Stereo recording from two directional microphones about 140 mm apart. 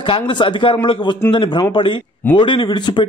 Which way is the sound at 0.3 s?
35° left (ahead or behind).